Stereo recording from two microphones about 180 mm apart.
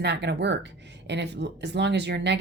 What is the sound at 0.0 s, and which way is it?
Speech, 70° right (ahead or behind).